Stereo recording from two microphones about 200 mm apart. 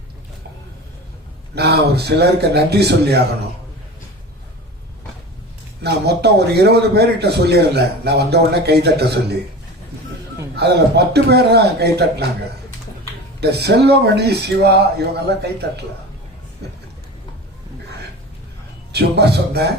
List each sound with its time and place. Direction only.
1.5 s speech: 55° right (ahead or behind)
5.8 s speech: 55° right (ahead or behind)
10.5 s speech: 55° right (ahead or behind)
13.4 s speech: 55° right (ahead or behind)
18.9 s speech: 55° right (ahead or behind)